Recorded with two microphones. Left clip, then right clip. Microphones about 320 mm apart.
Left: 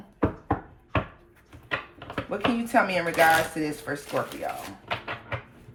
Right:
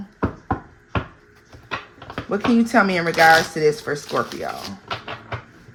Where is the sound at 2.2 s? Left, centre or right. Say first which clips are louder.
Right 8 dB; right.